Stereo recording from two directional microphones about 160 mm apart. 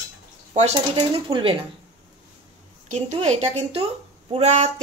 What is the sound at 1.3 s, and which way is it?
Speech, 35° right (ahead or behind).